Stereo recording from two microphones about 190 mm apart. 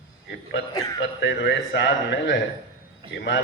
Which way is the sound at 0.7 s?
20° left (ahead or behind).